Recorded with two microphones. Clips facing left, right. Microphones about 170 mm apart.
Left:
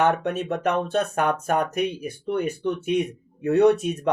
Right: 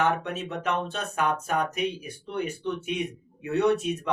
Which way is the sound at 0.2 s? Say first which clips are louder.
Left 7 dB; 50° left (ahead or behind).